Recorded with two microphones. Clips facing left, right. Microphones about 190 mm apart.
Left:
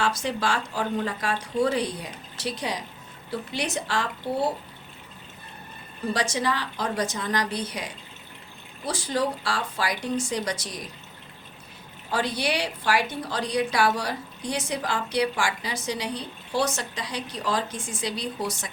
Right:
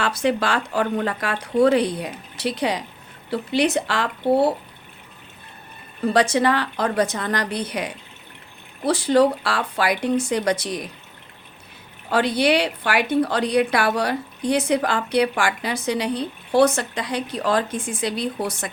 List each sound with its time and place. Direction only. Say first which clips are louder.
0.0 s a woman's voice: right 5 dB; 60° right (ahead or behind)
6.1 s a woman's voice: right 9 dB; 60° right (ahead or behind)
12.1 s a woman's voice: right 8 dB; 65° right (ahead or behind)